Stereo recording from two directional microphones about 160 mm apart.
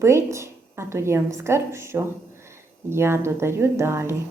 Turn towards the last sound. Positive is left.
turn(degrees=-15)  # may be behind; listen again after turning